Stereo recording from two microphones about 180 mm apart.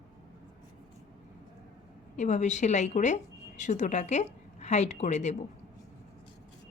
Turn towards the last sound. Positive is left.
turn(degrees=40)  # may be behind; listen again after turning